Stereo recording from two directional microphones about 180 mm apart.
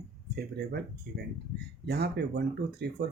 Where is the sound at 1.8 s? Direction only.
65° right (ahead or behind).